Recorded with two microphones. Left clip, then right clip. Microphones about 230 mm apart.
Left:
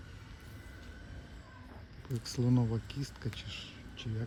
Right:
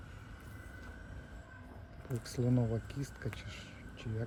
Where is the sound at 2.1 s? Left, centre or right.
Centre.